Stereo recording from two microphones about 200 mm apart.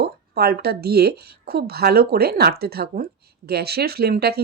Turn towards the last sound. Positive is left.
turn(degrees=-50)  # may be behind; listen again after turning